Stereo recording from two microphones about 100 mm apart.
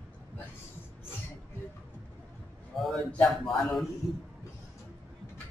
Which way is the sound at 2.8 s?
Centre (ahead or behind).